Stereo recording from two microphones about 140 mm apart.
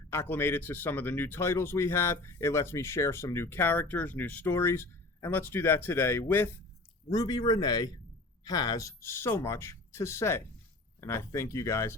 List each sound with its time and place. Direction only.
0.1 s speech: 15° left (ahead or behind)
7.1 s speech: 30° left (ahead or behind)